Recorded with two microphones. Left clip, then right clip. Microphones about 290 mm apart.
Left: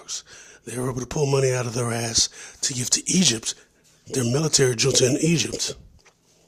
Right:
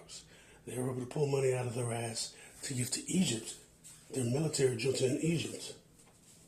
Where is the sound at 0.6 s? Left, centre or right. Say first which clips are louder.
Left 10 dB; left.